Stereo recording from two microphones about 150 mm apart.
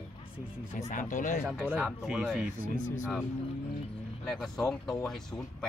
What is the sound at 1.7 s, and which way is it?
Speech, 5° right (ahead or behind).